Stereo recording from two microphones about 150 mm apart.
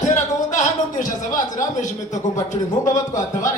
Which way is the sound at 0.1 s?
55° left (ahead or behind).